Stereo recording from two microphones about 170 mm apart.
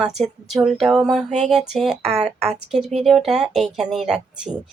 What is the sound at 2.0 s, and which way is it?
Speech, 35° right (ahead or behind).